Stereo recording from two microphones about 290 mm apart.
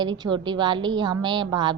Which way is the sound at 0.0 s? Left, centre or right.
Centre.